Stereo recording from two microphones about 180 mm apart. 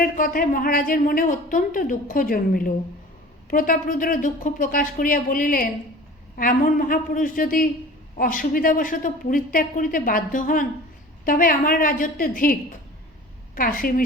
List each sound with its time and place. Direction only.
0.0 s speech: 50° left (ahead or behind)
13.6 s speech: 50° left (ahead or behind)